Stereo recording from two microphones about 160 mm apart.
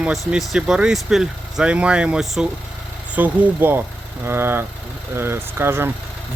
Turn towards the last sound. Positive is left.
turn(degrees=-15)  # may be behind; listen again after turning